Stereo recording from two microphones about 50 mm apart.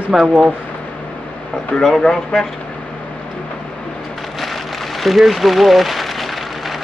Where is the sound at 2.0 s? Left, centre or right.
Centre.